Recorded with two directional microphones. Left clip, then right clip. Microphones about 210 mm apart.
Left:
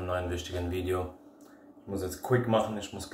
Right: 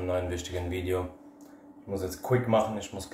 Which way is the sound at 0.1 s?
5° right (ahead or behind).